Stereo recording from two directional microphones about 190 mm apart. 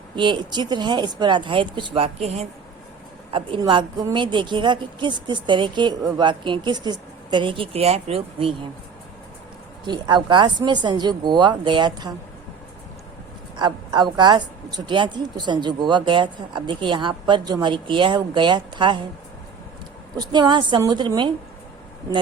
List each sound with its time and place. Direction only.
0.2 s a woman's voice: 25° right (ahead or behind)
9.8 s a woman's voice: 25° right (ahead or behind)
13.6 s a woman's voice: 20° right (ahead or behind)
20.1 s a woman's voice: 20° right (ahead or behind)